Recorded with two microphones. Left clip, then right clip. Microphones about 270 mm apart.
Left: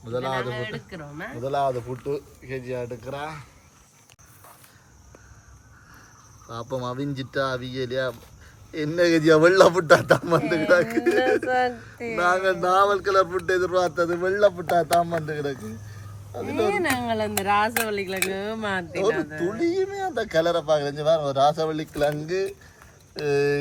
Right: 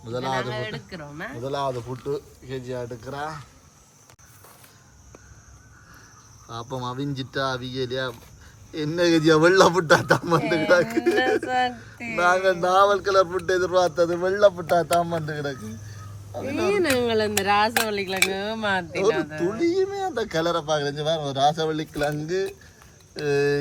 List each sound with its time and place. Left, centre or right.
0.0 s a man's voice: centre
6.5 s a man's voice: centre
16.7 s speech: centre
17.2 s a man's voice: centre